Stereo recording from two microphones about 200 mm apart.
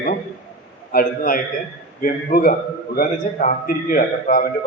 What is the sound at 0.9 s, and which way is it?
A man's voice, 45° left (ahead or behind).